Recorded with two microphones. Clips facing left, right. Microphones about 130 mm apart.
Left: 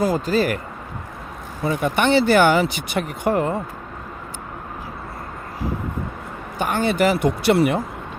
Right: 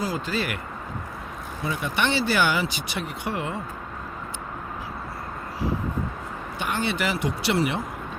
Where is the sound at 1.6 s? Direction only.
50° left (ahead or behind).